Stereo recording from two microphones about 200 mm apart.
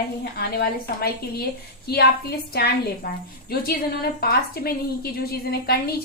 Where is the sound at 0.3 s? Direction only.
50° left (ahead or behind).